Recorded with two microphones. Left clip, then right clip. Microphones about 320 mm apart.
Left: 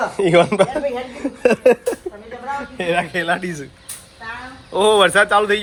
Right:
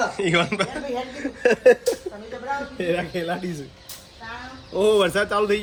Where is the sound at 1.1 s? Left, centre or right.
Left.